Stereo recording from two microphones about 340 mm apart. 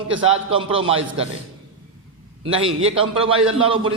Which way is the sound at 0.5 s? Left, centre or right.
Centre.